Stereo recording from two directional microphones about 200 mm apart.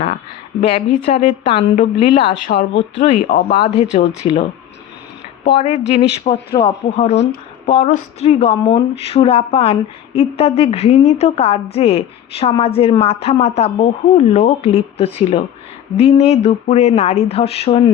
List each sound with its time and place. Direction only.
0.6 s a woman's voice: 35° left (ahead or behind)
5.5 s a woman's voice: 35° left (ahead or behind)